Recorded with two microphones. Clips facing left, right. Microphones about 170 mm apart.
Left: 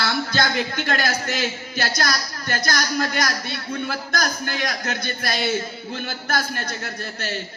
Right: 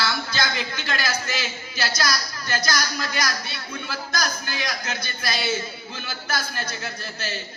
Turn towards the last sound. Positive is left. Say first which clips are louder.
# left 2 dB
turn(degrees=55)  # may be behind; listen again after turning